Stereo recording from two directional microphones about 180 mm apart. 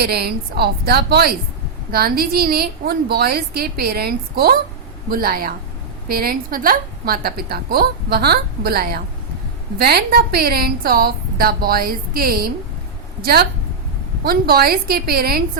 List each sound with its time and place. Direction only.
0.0 s a woman's voice: 60° right (ahead or behind)